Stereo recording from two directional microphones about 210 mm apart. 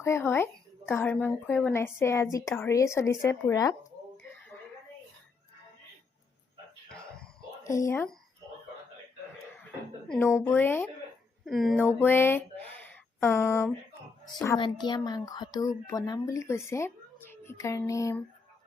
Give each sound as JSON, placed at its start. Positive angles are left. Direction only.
{"t": 0.0, "sound": "a woman's voice", "side_deg": 10}
{"t": 6.9, "sound": "a sound", "side_deg": 5}
{"t": 7.6, "sound": "a woman's voice", "side_deg": 15}
{"t": 10.1, "sound": "a woman's voice", "side_deg": 10}
{"t": 11.4, "sound": "speech", "side_deg": 0}
{"t": 11.9, "sound": "a woman's voice", "side_deg": 10}